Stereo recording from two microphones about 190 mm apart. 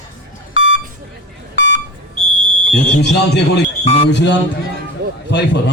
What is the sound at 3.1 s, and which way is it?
A man's voice, 65° left (ahead or behind).